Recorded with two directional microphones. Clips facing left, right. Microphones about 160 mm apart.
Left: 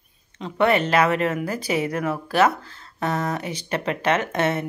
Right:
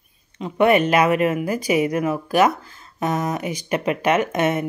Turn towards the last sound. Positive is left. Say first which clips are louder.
# right 3 dB
turn(degrees=-15)  # may be behind; listen again after turning